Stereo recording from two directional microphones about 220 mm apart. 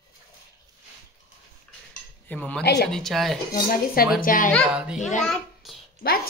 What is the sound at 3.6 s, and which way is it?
Speech, 40° left (ahead or behind).